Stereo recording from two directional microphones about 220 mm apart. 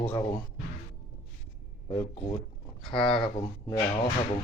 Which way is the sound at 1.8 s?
20° left (ahead or behind).